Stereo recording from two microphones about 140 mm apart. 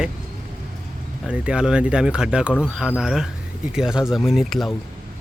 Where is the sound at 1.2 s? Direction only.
10° right (ahead or behind).